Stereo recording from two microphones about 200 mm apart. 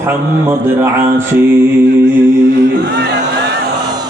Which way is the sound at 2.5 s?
55° right (ahead or behind).